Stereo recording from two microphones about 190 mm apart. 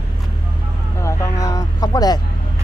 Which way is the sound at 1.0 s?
15° left (ahead or behind).